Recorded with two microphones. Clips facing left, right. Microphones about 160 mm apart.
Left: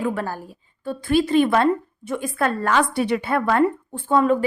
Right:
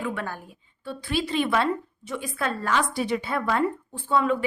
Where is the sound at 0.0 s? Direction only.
40° left (ahead or behind).